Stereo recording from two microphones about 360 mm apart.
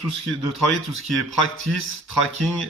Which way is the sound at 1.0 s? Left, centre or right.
Right.